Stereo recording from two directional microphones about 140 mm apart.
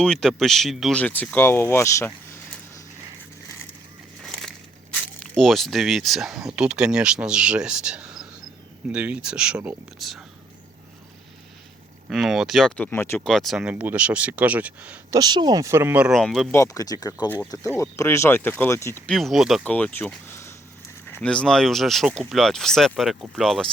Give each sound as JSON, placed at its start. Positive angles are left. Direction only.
{"t": 0.0, "sound": "speech", "side_deg": 5}
{"t": 4.2, "sound": "a sound", "side_deg": 0}
{"t": 4.9, "sound": "speech", "side_deg": 0}
{"t": 12.0, "sound": "speech", "side_deg": 0}
{"t": 13.2, "sound": "speech", "side_deg": 0}
{"t": 15.1, "sound": "speech", "side_deg": -30}
{"t": 16.0, "sound": "speech", "side_deg": -5}
{"t": 16.5, "sound": "speech", "side_deg": 25}
{"t": 19.0, "sound": "speech", "side_deg": 0}
{"t": 19.6, "sound": "speech", "side_deg": 10}
{"t": 21.1, "sound": "speech", "side_deg": 5}